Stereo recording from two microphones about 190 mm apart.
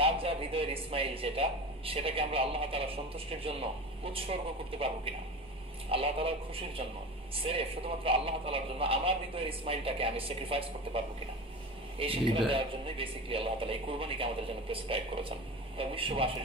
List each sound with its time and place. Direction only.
0.0 s speech: 30° right (ahead or behind)
12.0 s speech: 30° right (ahead or behind)